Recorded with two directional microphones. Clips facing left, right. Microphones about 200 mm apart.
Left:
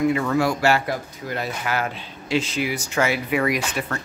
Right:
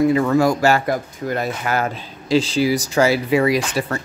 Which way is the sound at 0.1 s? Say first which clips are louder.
Right 5 dB; 40° right (ahead or behind).